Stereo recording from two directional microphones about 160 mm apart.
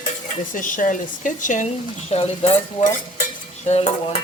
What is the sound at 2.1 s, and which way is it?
Frying, 40° left (ahead or behind).